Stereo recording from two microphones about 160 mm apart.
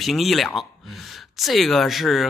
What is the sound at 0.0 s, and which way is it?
Speech, centre (ahead or behind).